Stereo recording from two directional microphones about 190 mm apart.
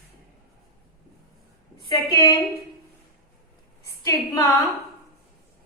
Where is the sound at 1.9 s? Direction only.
20° left (ahead or behind).